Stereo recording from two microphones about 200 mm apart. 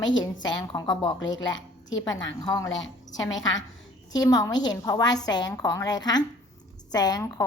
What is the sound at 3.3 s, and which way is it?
Speech, 70° left (ahead or behind).